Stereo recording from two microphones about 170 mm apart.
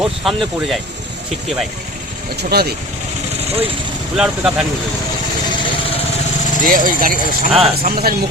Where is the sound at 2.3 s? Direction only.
65° right (ahead or behind).